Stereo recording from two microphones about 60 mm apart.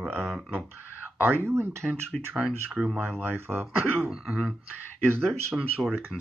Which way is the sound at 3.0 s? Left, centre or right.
Right.